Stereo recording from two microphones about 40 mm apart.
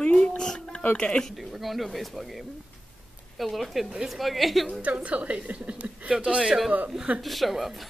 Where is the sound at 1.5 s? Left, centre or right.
Centre.